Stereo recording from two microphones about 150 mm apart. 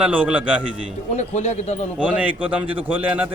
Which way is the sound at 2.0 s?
10° right (ahead or behind).